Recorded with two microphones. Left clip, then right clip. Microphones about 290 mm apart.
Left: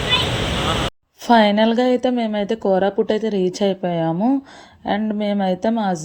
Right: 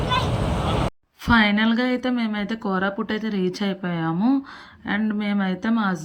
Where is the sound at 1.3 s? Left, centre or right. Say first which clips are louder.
Left 5 dB; centre.